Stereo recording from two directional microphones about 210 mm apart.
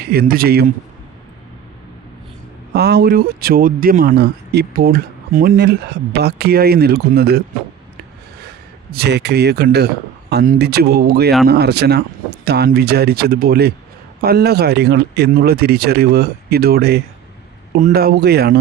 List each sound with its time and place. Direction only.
0.0 s speech: 50° right (ahead or behind)
2.7 s speech: 50° right (ahead or behind)
8.9 s speech: 50° right (ahead or behind)